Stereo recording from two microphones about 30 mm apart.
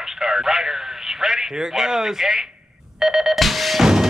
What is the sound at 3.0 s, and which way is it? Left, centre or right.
Telephone dialing, centre.